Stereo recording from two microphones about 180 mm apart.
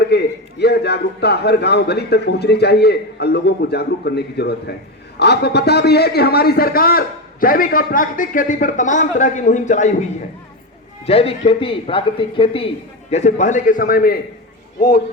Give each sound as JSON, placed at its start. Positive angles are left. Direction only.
{"t": 0.1, "sound": "a man's voice", "side_deg": 65}
{"t": 11.0, "sound": "a man's voice", "side_deg": 35}